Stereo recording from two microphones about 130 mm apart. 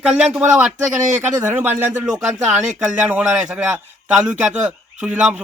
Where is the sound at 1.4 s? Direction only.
15° right (ahead or behind).